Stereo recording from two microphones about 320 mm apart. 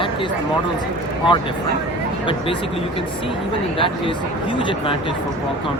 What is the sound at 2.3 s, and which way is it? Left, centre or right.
Speech, centre.